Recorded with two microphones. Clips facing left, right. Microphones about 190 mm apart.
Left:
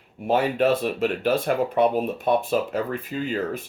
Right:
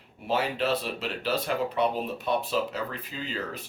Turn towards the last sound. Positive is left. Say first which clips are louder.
# left 8 dB
turn(degrees=50)  # may be behind; listen again after turning